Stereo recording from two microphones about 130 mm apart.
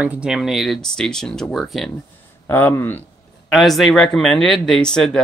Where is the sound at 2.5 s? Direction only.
15° left (ahead or behind).